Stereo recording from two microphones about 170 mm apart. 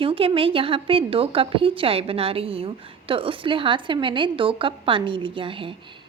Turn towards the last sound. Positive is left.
turn(degrees=-30)  # may be behind; listen again after turning